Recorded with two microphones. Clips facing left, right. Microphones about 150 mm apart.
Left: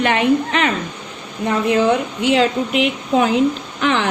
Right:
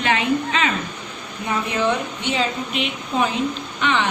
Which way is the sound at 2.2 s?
85° left.